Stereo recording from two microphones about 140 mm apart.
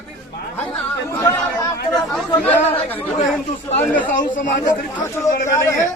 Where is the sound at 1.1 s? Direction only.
20° left (ahead or behind).